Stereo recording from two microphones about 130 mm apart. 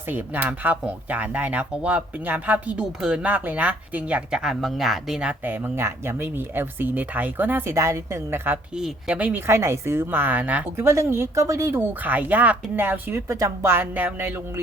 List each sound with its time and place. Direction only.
0.1 s speech: 15° right (ahead or behind)
8.7 s speech: 5° right (ahead or behind)